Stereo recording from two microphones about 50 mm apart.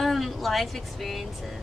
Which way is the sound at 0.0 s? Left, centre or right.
Centre.